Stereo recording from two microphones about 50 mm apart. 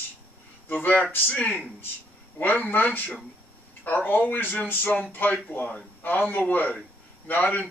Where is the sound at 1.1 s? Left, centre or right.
Left.